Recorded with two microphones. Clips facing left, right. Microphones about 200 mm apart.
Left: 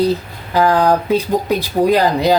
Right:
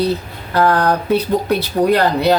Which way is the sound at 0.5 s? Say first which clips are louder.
Left 2 dB; 15° left (ahead or behind).